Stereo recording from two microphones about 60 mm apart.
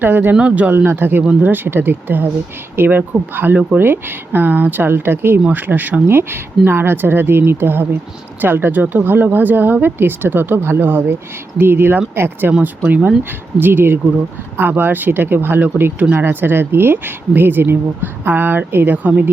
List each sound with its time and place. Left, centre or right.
0.0 s speech: right
0.3 s speech: right
0.9 s speech: right
12.6 s speech: right